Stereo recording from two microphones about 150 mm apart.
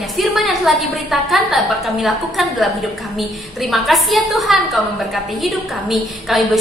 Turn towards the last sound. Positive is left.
turn(degrees=0)  # may be behind; listen again after turning